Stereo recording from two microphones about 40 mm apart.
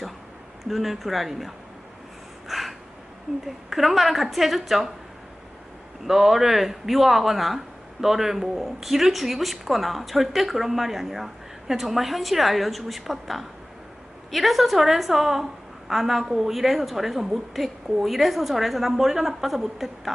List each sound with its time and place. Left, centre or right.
0.6 s speech: centre
2.5 s a sound: centre
3.4 s speech: centre
6.1 s speech: centre